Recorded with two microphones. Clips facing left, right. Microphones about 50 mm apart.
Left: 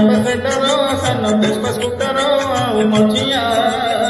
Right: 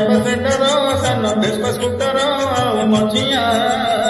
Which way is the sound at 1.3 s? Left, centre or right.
Left.